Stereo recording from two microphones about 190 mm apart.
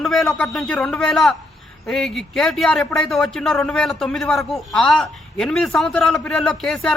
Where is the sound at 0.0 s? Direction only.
Centre (ahead or behind).